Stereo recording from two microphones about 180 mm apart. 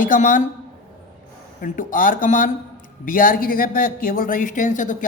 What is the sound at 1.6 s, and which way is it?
A man's voice, 50° left (ahead or behind).